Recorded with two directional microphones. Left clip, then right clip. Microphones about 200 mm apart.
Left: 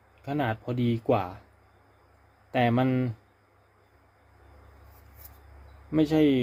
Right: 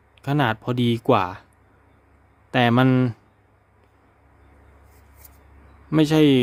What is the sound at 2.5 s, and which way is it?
Speech, 40° right (ahead or behind).